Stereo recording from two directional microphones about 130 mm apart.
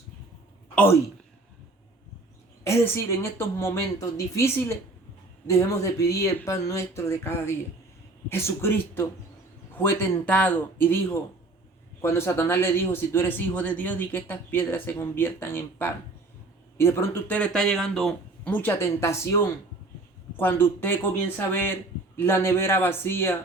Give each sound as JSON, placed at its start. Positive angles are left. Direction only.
{"t": 2.6, "sound": "speech", "side_deg": 20}
{"t": 18.5, "sound": "speech", "side_deg": 20}